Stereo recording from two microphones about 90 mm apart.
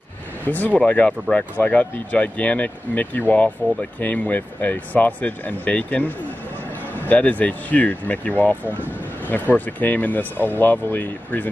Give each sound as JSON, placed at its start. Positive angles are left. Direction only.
{"t": 0.5, "sound": "speech", "side_deg": 15}